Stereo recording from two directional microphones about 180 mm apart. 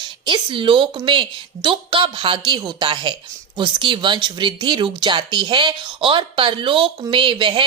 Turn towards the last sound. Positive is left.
turn(degrees=-30)  # may be behind; listen again after turning